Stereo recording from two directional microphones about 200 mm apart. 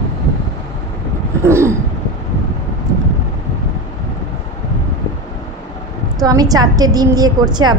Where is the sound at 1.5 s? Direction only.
15° right (ahead or behind).